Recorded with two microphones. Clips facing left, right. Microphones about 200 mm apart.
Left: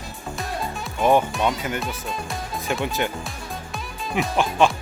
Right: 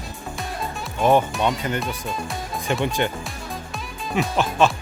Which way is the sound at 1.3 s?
Centre (ahead or behind).